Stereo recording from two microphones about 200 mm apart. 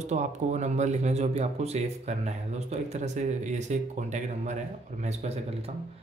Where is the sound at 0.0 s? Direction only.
35° right (ahead or behind).